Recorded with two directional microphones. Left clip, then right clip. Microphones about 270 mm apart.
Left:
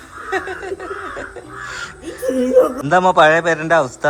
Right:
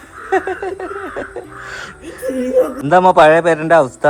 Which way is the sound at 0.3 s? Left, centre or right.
Centre.